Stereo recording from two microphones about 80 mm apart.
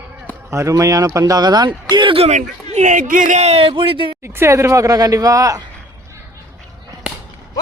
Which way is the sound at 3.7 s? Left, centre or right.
Right.